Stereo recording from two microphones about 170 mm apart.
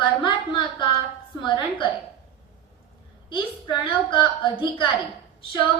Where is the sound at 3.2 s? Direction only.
30° left (ahead or behind).